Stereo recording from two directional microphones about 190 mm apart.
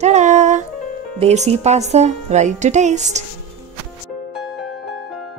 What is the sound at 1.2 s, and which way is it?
A woman's voice, 35° right (ahead or behind).